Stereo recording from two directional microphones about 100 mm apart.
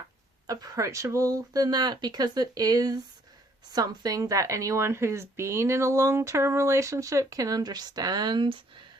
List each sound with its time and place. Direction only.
0.4 s a woman's voice: 40° right (ahead or behind); by 8.8 s 55° right (ahead or behind)